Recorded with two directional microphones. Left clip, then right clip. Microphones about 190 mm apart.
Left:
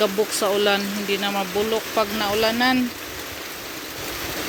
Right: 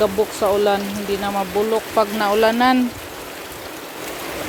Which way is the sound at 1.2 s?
10° right (ahead or behind).